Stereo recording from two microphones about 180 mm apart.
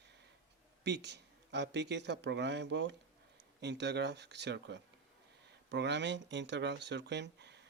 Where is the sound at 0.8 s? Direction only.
70° right (ahead or behind).